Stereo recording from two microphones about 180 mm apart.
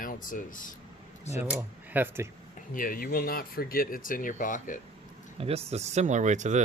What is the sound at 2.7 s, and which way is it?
Speech, 50° left (ahead or behind).